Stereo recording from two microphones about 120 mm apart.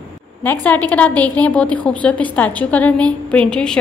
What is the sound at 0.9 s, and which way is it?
A woman's voice, 10° left (ahead or behind).